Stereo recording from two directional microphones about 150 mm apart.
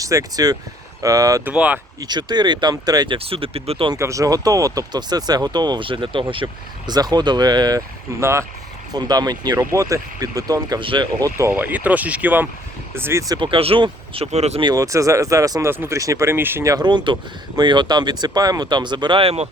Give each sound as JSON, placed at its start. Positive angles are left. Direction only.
{"t": 0.0, "sound": "speech", "side_deg": -25}
{"t": 1.5, "sound": "speech", "side_deg": -10}
{"t": 2.0, "sound": "speech", "side_deg": -30}
{"t": 3.2, "sound": "speech", "side_deg": -40}
{"t": 3.9, "sound": "speech", "side_deg": -20}
{"t": 11.3, "sound": "speech", "side_deg": -15}
{"t": 14.6, "sound": "speech", "side_deg": -25}